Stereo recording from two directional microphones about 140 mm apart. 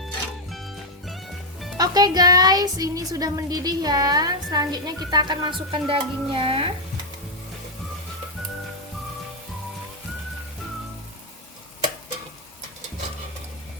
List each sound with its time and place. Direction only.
0.5 s music: centre (ahead or behind)
1.8 s speech: 30° right (ahead or behind)